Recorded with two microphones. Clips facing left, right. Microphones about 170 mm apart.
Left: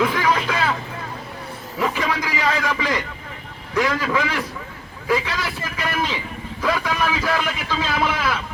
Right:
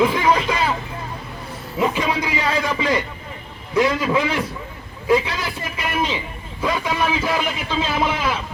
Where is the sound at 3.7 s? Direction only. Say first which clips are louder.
Right 3 dB; 25° right (ahead or behind).